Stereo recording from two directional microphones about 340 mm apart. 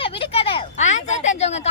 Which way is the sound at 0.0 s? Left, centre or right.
Centre.